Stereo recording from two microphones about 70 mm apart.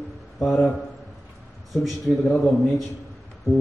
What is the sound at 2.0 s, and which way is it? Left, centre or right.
Speech, centre.